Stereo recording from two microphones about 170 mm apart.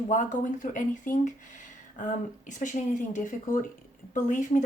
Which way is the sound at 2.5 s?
45° left (ahead or behind).